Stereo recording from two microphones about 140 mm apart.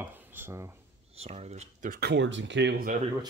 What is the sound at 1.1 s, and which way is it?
Speech, 50° right (ahead or behind).